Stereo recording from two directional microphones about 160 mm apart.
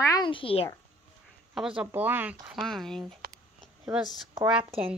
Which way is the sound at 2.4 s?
Centre (ahead or behind).